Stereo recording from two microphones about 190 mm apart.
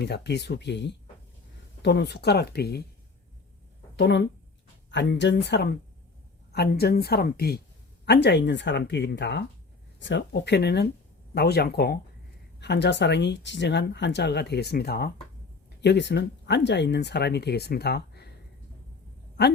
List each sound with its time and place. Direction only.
0.0 s speech: 60° left (ahead or behind)
3.9 s a woman's voice: 65° left (ahead or behind)
15.8 s speech: 65° left (ahead or behind)